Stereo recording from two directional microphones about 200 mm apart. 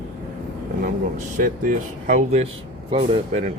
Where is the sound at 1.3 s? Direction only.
40° right (ahead or behind).